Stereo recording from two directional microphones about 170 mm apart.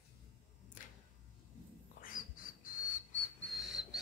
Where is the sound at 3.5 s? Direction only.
Centre (ahead or behind).